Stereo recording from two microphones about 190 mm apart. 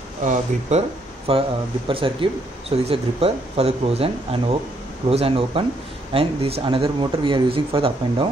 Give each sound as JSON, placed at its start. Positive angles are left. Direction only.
{"t": 0.2, "sound": "speech", "side_deg": -40}